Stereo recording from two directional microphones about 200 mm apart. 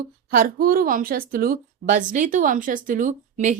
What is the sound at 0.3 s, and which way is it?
A woman's voice, 45° right (ahead or behind).